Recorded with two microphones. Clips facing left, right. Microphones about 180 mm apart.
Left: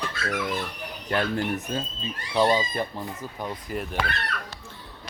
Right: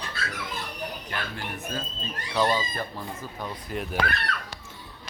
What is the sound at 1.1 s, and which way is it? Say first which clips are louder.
Speech: left 9 dB; 50° left (ahead or behind).